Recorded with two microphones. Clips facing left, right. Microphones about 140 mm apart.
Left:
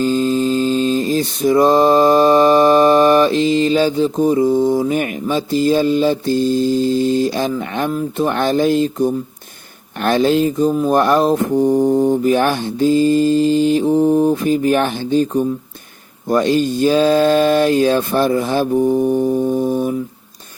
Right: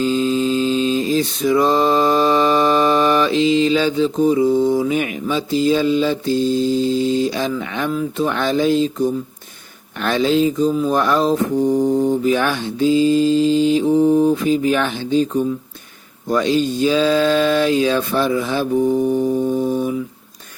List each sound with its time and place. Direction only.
0.0 s mantra: 45° left (ahead or behind)
11.5 s mantra: 25° left (ahead or behind)
12.2 s mantra: 45° left (ahead or behind)
13.8 s mantra: 15° left (ahead or behind)
14.4 s mantra: 50° left (ahead or behind)
16.3 s mantra: 50° left (ahead or behind)
18.9 s music: 15° left (ahead or behind)
19.7 s mantra: 45° left (ahead or behind)